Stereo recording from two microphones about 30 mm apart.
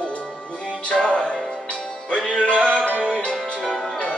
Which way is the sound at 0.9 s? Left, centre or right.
Centre.